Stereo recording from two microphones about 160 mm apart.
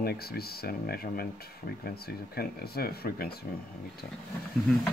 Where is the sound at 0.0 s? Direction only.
80° left.